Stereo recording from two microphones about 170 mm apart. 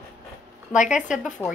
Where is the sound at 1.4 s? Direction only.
10° left (ahead or behind).